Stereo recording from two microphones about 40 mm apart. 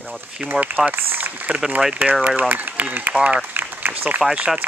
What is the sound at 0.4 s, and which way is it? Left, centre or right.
Speech, right.